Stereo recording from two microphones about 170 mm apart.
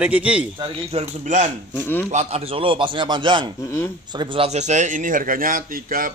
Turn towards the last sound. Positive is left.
turn(degrees=-55)  # may be behind; listen again after turning